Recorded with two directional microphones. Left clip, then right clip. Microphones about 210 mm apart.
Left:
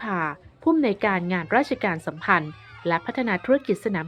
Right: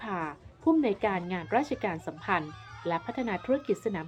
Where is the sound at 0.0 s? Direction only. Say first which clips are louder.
Left 8 dB; 45° left (ahead or behind).